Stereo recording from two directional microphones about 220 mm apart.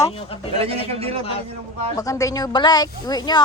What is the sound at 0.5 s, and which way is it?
Speech, 25° right (ahead or behind).